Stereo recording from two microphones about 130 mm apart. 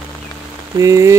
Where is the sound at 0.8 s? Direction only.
25° right (ahead or behind).